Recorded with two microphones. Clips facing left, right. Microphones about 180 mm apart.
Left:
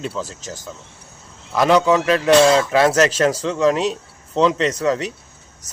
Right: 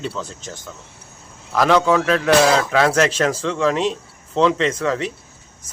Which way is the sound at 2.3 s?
25° left (ahead or behind).